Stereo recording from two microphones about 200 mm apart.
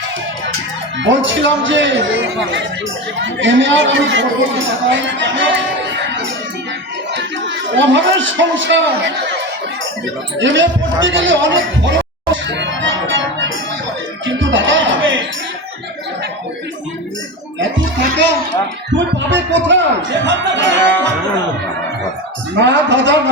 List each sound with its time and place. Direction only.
0.9 s a woman's voice: 70° right (ahead or behind)
10.3 s a sound: 65° right (ahead or behind)
14.3 s music: 70° right (ahead or behind)
17.6 s music: 65° right (ahead or behind)
18.9 s a woman's voice: 65° right (ahead or behind)
22.6 s a woman's voice: 65° right (ahead or behind)